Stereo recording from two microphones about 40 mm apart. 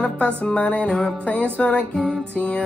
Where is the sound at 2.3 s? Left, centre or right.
Left.